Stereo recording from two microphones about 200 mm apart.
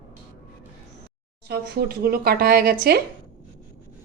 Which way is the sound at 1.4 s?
50° right (ahead or behind).